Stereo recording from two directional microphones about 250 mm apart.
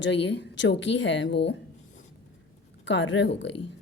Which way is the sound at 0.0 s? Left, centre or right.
Left.